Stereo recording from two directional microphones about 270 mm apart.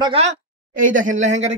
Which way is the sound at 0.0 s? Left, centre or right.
Right.